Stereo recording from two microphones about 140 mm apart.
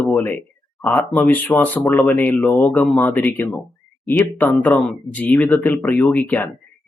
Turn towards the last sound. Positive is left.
turn(degrees=10)  # may be behind; listen again after turning